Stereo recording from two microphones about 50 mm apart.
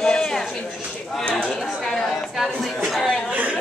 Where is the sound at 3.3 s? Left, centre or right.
Right.